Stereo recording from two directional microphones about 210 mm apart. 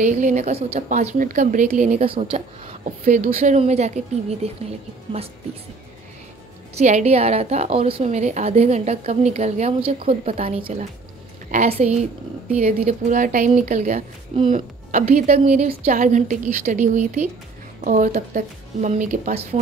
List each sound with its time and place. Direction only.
0.0 s a woman's voice: 35° right (ahead or behind)
6.7 s a woman's voice: 35° right (ahead or behind)